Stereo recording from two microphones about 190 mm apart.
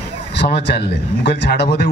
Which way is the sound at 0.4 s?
65° left (ahead or behind).